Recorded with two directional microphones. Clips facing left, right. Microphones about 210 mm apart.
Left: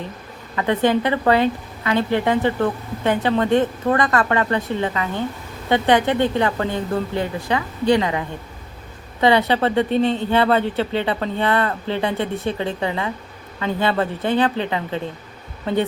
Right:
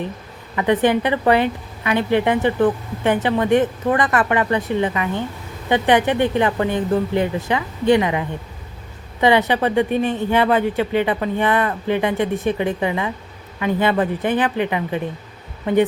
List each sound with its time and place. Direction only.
0.5 s a woman's voice: 15° right (ahead or behind)
9.2 s a woman's voice: 15° right (ahead or behind)